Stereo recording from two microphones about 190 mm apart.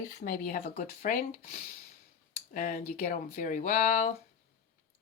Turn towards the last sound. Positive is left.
turn(degrees=40)  # may be behind; listen again after turning